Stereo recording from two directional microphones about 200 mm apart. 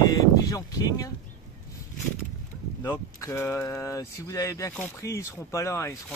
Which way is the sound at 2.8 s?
15° left (ahead or behind).